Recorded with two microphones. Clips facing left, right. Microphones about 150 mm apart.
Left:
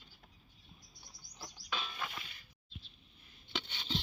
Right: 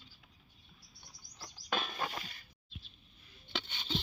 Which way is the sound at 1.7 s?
50° right (ahead or behind).